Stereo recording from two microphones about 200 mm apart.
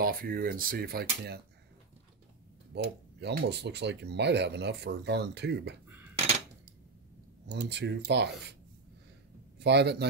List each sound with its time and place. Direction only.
0.0 s speech: 45° right (ahead or behind)
2.7 s speech: 55° right (ahead or behind)
7.5 s speech: 60° right (ahead or behind)
9.6 s speech: 55° right (ahead or behind)